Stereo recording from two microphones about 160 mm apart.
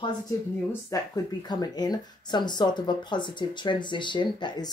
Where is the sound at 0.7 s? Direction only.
20° left (ahead or behind).